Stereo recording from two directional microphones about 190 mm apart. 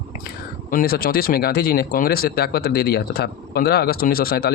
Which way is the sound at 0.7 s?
50° left (ahead or behind).